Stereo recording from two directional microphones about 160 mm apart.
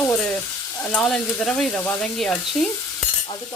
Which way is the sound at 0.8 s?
5° left (ahead or behind).